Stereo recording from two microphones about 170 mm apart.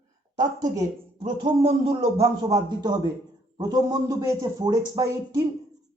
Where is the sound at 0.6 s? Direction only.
20° right (ahead or behind).